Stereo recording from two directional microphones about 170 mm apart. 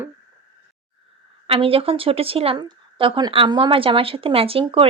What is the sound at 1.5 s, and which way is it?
A woman's voice, 35° right (ahead or behind).